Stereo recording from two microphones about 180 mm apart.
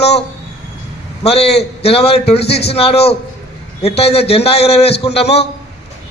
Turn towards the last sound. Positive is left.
turn(degrees=35)  # may be behind; listen again after turning